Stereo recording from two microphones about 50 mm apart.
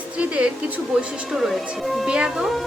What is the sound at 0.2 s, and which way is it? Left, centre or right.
Speech, right.